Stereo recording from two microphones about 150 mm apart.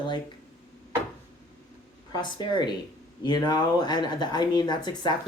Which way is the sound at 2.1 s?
30° left (ahead or behind).